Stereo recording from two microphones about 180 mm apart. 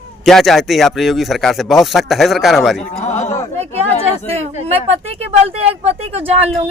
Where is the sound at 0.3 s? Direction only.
Centre (ahead or behind).